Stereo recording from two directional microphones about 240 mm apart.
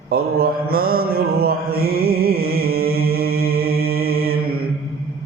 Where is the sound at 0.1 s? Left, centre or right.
Right.